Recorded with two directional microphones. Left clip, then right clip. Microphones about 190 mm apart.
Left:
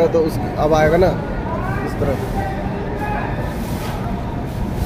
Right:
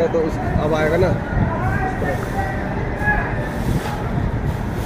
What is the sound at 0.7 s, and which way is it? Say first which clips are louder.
Speech: left 4 dB; 15° left (ahead or behind).